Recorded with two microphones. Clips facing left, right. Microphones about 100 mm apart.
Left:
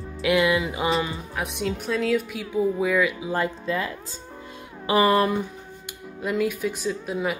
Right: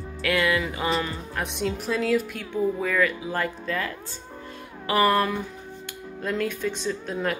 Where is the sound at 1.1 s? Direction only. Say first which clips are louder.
Left 1 dB; centre (ahead or behind); by 5.4 s 20° left (ahead or behind).